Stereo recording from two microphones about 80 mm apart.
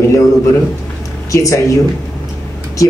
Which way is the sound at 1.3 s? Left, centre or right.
Left.